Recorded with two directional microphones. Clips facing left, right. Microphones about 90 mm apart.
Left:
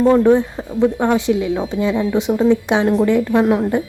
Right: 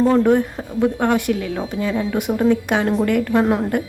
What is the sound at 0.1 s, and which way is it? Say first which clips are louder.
A woman's voice: left 3 dB; 15° left (ahead or behind).